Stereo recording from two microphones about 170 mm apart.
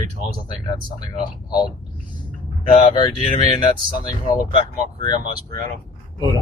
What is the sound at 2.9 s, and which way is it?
Speech, 25° left (ahead or behind).